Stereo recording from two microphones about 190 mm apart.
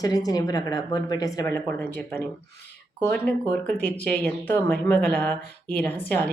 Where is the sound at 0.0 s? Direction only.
20° left (ahead or behind).